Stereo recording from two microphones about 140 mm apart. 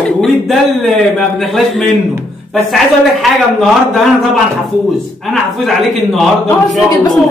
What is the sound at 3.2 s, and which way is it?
A woman's voice, centre (ahead or behind).